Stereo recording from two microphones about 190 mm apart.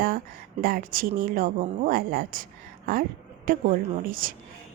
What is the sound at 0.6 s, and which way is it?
Speech, 50° right (ahead or behind).